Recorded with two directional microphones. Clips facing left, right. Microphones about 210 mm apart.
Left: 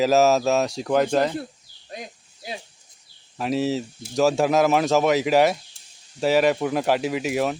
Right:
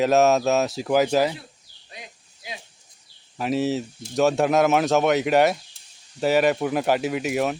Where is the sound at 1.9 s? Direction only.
40° left (ahead or behind).